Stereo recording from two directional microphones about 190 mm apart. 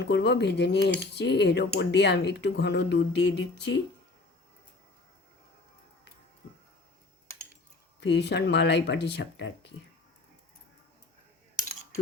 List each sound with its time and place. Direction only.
0.0 s speech: 60° left (ahead or behind)
8.0 s speech: 65° left (ahead or behind)